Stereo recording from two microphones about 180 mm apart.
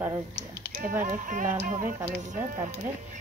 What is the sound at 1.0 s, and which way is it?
Speech, 45° right (ahead or behind).